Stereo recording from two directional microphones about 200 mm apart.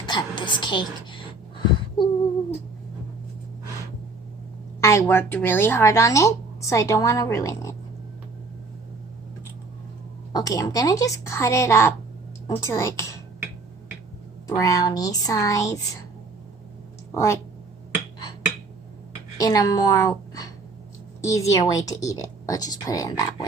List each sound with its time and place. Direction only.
0.0 s a sound: 20° left (ahead or behind)
4.8 s speech: 15° left (ahead or behind)
10.3 s speech: 15° left (ahead or behind)
14.4 s speech: 15° left (ahead or behind)
19.4 s a woman's voice: 20° left (ahead or behind)